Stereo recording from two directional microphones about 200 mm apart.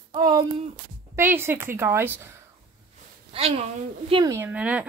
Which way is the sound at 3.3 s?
30° right (ahead or behind).